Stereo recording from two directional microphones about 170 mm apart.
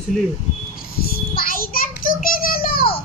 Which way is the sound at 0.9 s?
60° left (ahead or behind).